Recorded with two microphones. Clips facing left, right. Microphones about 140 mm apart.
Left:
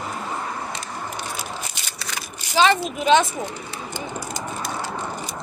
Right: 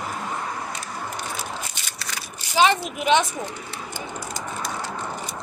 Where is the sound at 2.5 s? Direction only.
15° right (ahead or behind).